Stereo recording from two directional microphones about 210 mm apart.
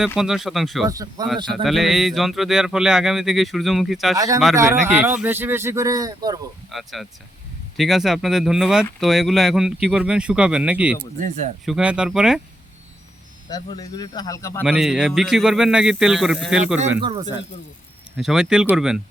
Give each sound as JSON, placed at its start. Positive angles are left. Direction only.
{"t": 0.2, "sound": "speech", "side_deg": 0}
{"t": 0.9, "sound": "speech", "side_deg": -15}
{"t": 1.6, "sound": "speech", "side_deg": 0}
{"t": 4.5, "sound": "speech", "side_deg": -15}
{"t": 6.7, "sound": "speech", "side_deg": 0}
{"t": 11.2, "sound": "speech", "side_deg": -35}
{"t": 11.6, "sound": "speech", "side_deg": -5}
{"t": 13.7, "sound": "speech", "side_deg": 15}
{"t": 14.6, "sound": "speech", "side_deg": -5}
{"t": 17.0, "sound": "speech", "side_deg": -25}
{"t": 18.2, "sound": "speech", "side_deg": 0}